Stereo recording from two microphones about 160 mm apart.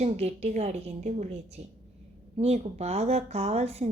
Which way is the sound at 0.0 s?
40° right (ahead or behind).